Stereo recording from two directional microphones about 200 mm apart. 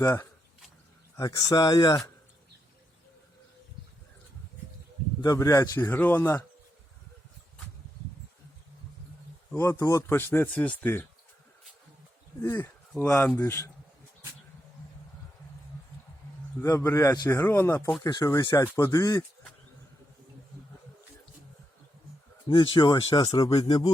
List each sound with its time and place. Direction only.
0.0 s speech: 15° left (ahead or behind)
5.2 s speech: 15° left (ahead or behind)
9.5 s speech: 15° left (ahead or behind)
12.4 s speech: 15° left (ahead or behind)
16.6 s speech: 15° left (ahead or behind)
22.4 s speech: 25° left (ahead or behind)